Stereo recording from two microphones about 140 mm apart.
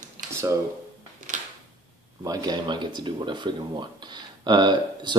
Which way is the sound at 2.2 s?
25° right (ahead or behind).